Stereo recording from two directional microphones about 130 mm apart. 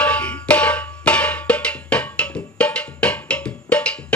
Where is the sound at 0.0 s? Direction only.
10° left (ahead or behind).